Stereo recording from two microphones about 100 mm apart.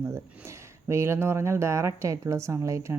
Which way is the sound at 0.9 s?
25° right (ahead or behind).